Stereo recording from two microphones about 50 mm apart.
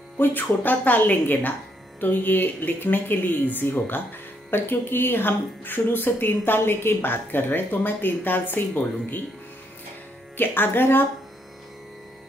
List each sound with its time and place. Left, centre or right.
0.2 s speech: left
10.3 s speech: left